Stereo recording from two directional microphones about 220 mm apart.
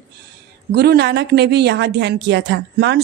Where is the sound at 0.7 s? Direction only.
50° right (ahead or behind).